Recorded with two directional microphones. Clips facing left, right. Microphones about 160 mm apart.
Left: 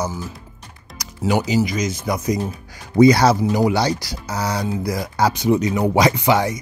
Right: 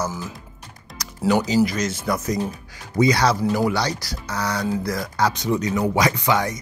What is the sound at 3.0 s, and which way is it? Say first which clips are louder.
Speech: left 6 dB; 35° left (ahead or behind).